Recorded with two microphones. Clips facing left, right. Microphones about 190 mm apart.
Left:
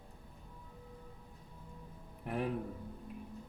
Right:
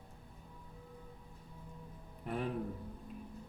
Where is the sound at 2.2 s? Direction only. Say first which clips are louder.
Left 1 dB; 5° left (ahead or behind).